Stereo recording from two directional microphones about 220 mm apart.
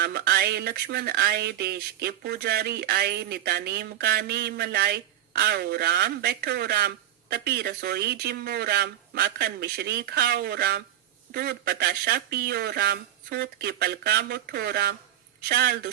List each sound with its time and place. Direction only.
0.0 s speech: 45° right (ahead or behind)